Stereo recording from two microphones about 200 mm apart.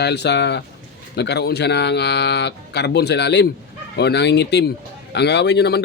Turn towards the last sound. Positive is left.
turn(degrees=55)  # may be behind; listen again after turning